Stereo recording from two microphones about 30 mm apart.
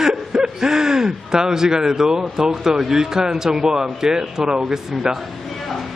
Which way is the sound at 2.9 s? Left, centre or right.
Centre.